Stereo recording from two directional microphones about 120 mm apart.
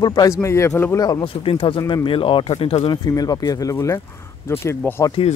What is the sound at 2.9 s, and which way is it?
Speech, 35° left (ahead or behind).